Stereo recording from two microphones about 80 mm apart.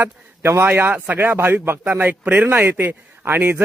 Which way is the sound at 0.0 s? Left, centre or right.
Right.